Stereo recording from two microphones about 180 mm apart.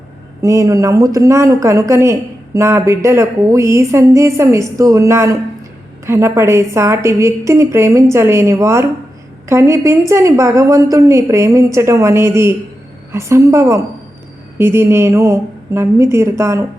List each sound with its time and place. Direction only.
0.4 s a woman's voice: 20° right (ahead or behind)